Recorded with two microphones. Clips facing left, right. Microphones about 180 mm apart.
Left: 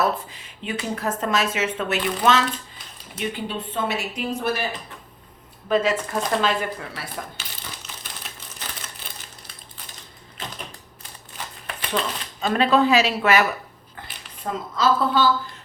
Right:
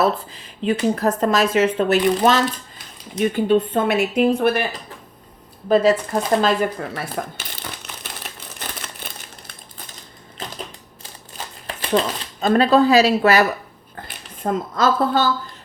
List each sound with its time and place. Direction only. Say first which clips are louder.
0.0 s a woman's voice: right 4 dB; 35° right (ahead or behind); by 4.6 s 60° right (ahead or behind)
5.6 s speech: right 6 dB; 35° right (ahead or behind)
11.6 s speech: right 7 dB; 35° right (ahead or behind)
14.4 s a woman's voice: right 3 dB; 50° right (ahead or behind)